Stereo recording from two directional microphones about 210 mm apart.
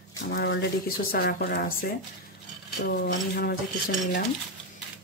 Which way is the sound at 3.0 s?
50° left (ahead or behind).